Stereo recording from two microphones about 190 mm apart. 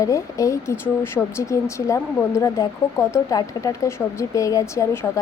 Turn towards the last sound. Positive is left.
turn(degrees=15)  # may be behind; listen again after turning